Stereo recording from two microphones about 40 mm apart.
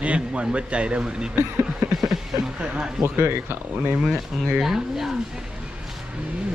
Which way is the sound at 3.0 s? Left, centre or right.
Right.